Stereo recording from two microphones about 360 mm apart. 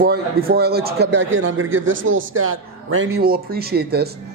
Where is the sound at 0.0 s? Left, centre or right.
Right.